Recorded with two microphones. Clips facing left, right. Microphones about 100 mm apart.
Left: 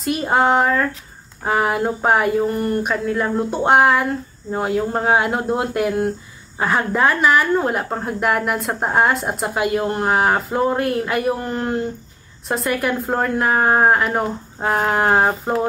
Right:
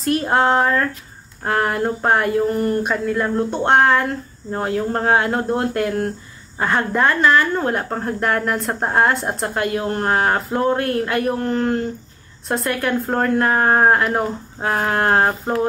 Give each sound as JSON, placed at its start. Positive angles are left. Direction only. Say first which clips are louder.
{"t": 0.0, "sound": "a woman's voice", "louder": "even", "side_deg": 5}